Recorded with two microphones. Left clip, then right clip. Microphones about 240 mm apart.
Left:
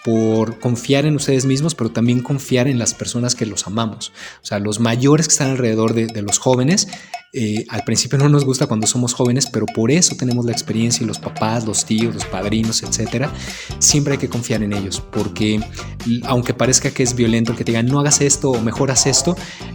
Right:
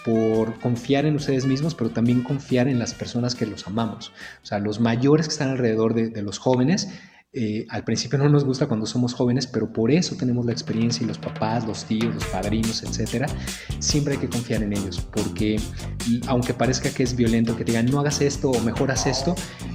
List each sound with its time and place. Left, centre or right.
0.0 s speech: left